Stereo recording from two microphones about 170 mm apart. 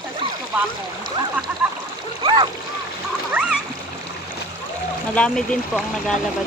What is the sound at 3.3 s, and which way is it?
Splash, 5° right (ahead or behind).